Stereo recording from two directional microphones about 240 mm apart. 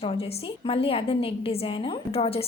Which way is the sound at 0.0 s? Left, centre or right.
Left.